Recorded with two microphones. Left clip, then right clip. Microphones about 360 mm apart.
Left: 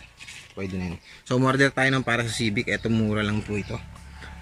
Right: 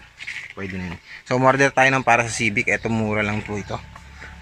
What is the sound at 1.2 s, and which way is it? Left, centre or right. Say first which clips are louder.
Speech: right 7 dB; centre.